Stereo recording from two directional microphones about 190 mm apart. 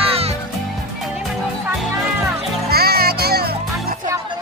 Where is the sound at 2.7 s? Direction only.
55° right (ahead or behind).